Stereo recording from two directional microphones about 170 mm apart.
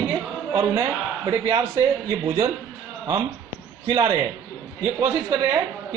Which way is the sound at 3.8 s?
20° right (ahead or behind).